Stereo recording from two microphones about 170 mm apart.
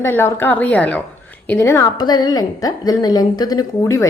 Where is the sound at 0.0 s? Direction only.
15° left (ahead or behind).